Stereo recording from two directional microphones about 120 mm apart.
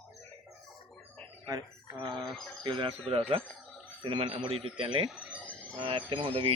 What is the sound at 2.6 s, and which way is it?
Speech, 45° right (ahead or behind).